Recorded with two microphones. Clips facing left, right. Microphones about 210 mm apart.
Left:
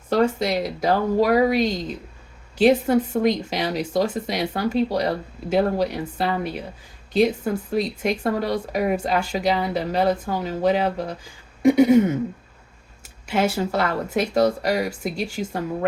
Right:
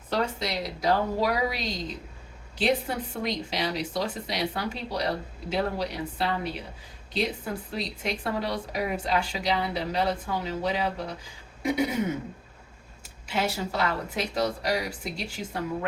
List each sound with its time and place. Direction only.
0.1 s speech: 45° left (ahead or behind)
13.2 s speech: 50° left (ahead or behind)